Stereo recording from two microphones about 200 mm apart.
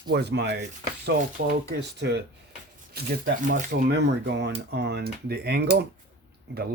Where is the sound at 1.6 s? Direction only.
55° right (ahead or behind).